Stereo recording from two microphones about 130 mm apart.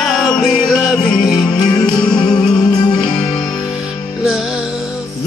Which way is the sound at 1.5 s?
30° left (ahead or behind).